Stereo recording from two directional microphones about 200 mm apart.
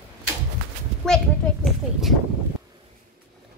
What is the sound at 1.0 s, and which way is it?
A child's voice, centre (ahead or behind).